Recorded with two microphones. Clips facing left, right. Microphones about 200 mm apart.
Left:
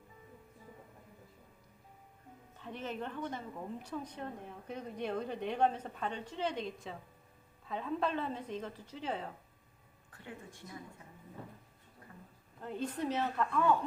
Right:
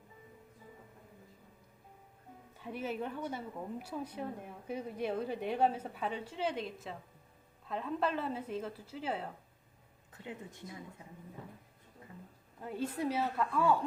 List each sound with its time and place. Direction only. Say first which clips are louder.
2.6 s a woman's voice: right 3 dB; 10° right (ahead or behind)
10.1 s speech: right 3 dB; 20° right (ahead or behind)
12.6 s a woman's voice: right 1 dB; 10° right (ahead or behind)